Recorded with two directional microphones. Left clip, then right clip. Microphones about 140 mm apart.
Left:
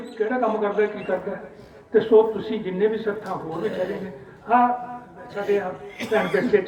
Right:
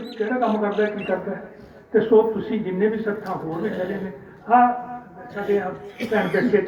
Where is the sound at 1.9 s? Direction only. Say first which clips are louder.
Even; 45° left (ahead or behind).